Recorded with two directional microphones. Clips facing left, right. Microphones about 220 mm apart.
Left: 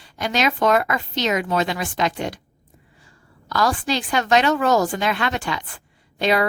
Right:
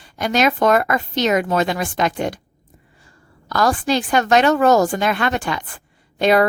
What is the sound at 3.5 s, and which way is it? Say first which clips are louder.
Speech: right 3 dB; 50° right (ahead or behind).